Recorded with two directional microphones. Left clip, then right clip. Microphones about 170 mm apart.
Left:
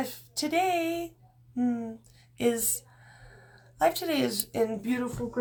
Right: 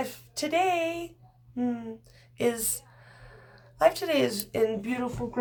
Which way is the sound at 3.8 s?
10° right (ahead or behind).